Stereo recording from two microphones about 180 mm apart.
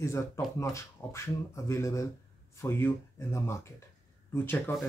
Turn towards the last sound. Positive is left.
turn(degrees=10)  # may be behind; listen again after turning